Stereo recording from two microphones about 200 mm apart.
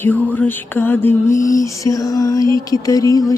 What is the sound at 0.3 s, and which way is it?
Music, 10° left (ahead or behind).